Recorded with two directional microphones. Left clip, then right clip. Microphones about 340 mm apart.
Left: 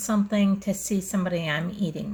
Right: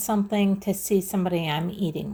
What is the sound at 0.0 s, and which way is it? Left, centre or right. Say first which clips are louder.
Speech: right 1 dB; centre.